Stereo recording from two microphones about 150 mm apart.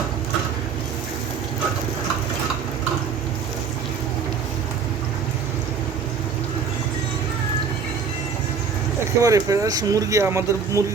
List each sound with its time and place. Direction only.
9.2 s speech: 20° right (ahead or behind)